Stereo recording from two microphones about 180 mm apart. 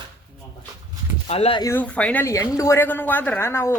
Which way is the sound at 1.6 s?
10° left (ahead or behind).